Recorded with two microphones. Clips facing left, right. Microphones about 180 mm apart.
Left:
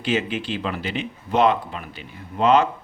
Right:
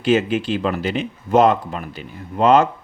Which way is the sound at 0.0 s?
45° right (ahead or behind).